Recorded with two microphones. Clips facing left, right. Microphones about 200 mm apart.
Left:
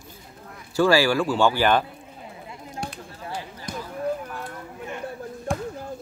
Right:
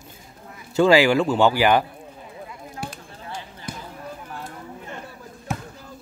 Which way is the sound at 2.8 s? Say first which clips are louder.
Right 1 dB; 5° right (ahead or behind).